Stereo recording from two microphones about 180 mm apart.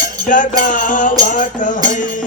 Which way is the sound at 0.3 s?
45° left (ahead or behind).